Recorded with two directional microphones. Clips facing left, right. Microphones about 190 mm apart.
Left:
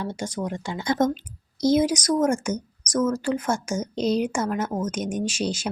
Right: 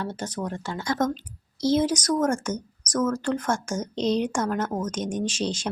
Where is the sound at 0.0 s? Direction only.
10° left (ahead or behind).